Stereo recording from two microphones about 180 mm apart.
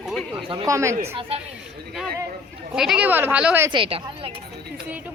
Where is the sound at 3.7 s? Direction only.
30° right (ahead or behind).